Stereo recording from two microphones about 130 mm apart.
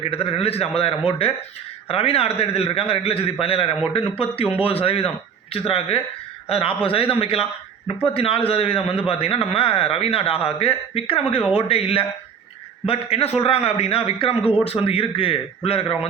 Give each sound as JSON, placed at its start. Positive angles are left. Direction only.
{"t": 0.0, "sound": "a man's voice", "side_deg": 50}